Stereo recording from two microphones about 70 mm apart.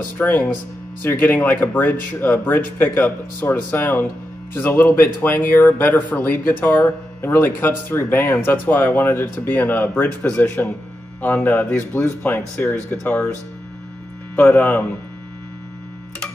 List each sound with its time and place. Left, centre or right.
0.2 s speech: left